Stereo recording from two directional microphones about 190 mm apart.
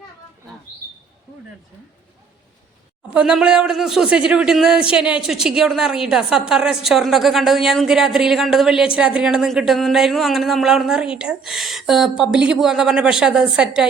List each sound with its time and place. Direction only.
3.2 s speech: 5° right (ahead or behind)